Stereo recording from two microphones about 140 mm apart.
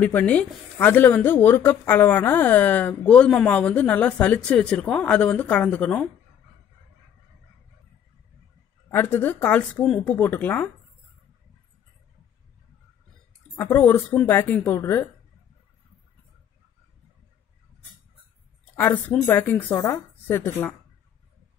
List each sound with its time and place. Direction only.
0.0 s speech: 10° left (ahead or behind)
8.9 s speech: 15° left (ahead or behind)
13.6 s speech: 15° left (ahead or behind)
18.8 s speech: 15° left (ahead or behind)